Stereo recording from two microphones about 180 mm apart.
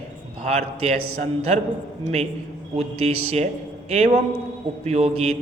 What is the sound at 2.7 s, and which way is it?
A man's voice, 35° right (ahead or behind).